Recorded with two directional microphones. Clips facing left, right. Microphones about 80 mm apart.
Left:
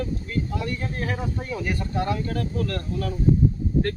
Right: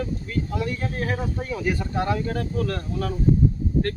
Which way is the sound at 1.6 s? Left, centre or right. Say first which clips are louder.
Right 2 dB; centre.